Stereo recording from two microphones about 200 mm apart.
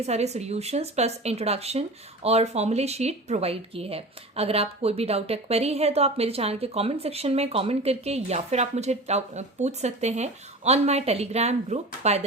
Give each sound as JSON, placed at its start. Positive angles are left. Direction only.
{"t": 0.0, "sound": "speech", "side_deg": -35}